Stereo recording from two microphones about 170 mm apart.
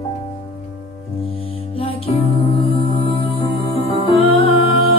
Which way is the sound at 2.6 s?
35° left (ahead or behind).